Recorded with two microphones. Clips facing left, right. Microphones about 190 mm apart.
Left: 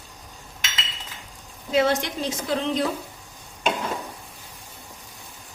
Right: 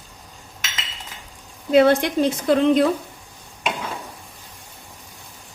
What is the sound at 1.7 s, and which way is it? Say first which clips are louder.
Speech: right 7 dB; 55° right (ahead or behind).